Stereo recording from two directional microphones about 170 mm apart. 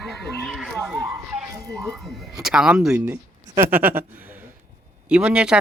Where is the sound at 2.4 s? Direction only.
5° right (ahead or behind).